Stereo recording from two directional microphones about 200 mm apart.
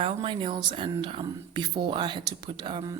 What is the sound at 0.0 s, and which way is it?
A woman's voice, 25° right (ahead or behind).